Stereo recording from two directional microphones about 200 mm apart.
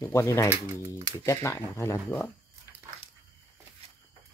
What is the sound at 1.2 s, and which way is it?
Speech, 15° left (ahead or behind).